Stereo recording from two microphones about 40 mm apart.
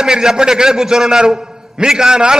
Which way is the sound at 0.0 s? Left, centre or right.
Centre.